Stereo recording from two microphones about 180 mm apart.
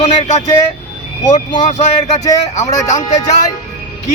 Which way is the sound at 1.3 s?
25° left (ahead or behind).